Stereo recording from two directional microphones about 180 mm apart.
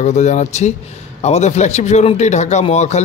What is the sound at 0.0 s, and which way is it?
Speech, 40° left (ahead or behind).